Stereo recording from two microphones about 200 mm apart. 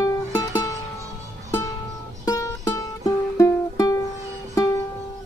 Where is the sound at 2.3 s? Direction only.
15° left (ahead or behind).